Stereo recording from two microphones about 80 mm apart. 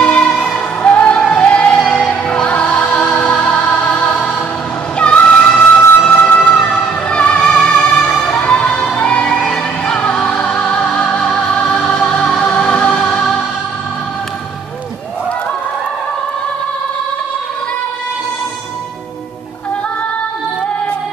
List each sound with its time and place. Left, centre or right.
0.0 s music: centre